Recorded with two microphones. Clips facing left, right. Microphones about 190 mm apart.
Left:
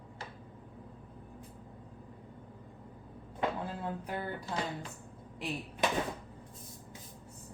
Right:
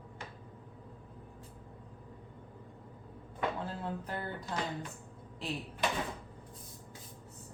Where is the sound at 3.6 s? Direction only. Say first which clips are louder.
Left 1 dB; 10° left (ahead or behind).